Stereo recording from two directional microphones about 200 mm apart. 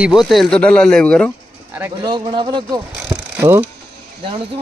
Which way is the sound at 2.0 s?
25° right (ahead or behind).